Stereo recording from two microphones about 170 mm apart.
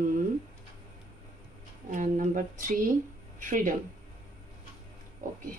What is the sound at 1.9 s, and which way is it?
A woman's voice, 50° right (ahead or behind).